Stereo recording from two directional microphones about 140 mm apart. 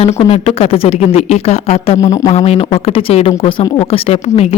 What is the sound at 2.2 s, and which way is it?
Speech, 50° left (ahead or behind).